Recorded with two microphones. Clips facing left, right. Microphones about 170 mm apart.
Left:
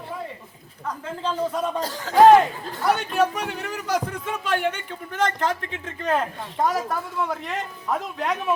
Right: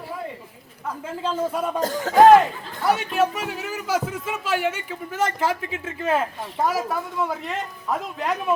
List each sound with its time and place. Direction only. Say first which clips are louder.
1.2 s a man's voice: right 1 dB; 10° right (ahead or behind)
1.8 s speech: right 5 dB; 50° right (ahead or behind)
2.8 s a man's voice: even; centre (ahead or behind)